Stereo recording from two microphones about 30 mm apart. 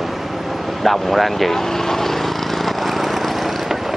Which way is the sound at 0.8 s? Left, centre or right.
Centre.